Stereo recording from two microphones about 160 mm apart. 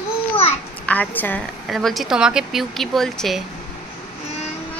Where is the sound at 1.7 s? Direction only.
Centre (ahead or behind).